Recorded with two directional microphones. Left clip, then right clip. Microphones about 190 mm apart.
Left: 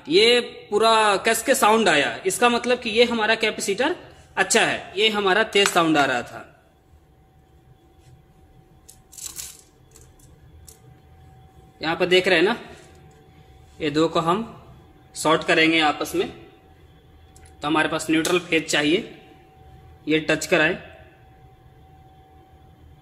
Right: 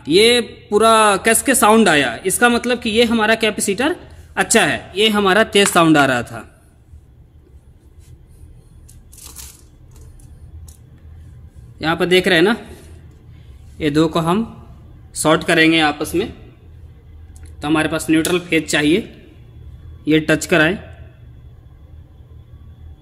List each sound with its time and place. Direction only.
0.0 s a man's voice: 35° right (ahead or behind)
11.8 s a man's voice: 40° right (ahead or behind)
13.7 s a man's voice: 40° right (ahead or behind)
17.6 s speech: 30° right (ahead or behind)
20.1 s a man's voice: 40° right (ahead or behind)